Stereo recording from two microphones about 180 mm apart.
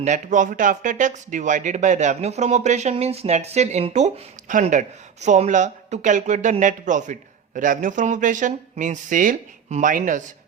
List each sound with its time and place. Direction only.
0.0 s speech: 45° right (ahead or behind)